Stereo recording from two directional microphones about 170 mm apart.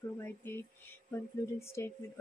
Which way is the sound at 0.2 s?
15° left (ahead or behind).